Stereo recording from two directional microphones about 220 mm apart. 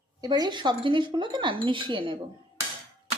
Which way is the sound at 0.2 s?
20° right (ahead or behind).